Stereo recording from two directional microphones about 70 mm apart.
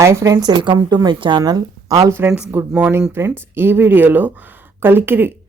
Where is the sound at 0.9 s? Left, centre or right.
Right.